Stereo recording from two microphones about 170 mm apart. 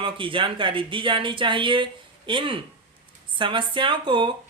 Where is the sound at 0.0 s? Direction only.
30° right (ahead or behind).